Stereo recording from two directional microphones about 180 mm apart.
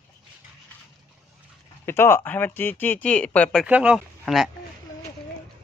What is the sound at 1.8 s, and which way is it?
Speech, 15° left (ahead or behind).